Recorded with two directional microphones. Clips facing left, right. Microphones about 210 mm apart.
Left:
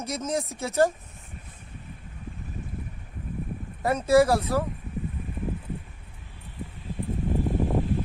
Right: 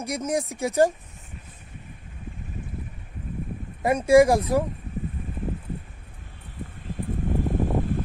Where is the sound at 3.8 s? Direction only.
10° right (ahead or behind).